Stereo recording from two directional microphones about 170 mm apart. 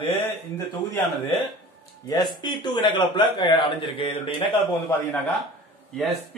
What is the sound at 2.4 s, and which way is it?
A man's voice, 25° left (ahead or behind).